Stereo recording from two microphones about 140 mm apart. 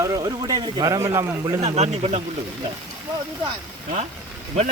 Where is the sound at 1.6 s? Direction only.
50° right (ahead or behind).